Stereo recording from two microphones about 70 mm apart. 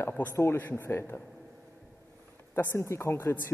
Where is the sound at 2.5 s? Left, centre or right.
Left.